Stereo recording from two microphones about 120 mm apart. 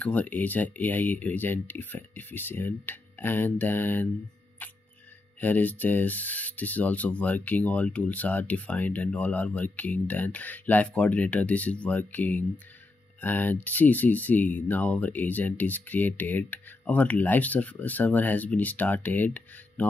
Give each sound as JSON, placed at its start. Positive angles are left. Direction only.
{"t": 0.0, "sound": "speech", "side_deg": 10}
{"t": 4.6, "sound": "music", "side_deg": 15}
{"t": 5.4, "sound": "speech", "side_deg": 15}